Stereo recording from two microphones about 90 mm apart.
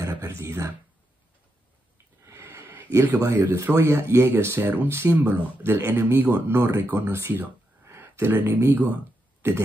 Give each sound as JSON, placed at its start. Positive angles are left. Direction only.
{"t": 0.0, "sound": "speech", "side_deg": -30}
{"t": 2.2, "sound": "a sound", "side_deg": -30}
{"t": 3.3, "sound": "speech", "side_deg": -25}